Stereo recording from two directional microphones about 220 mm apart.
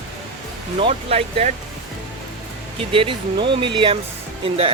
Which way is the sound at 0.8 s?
25° right (ahead or behind).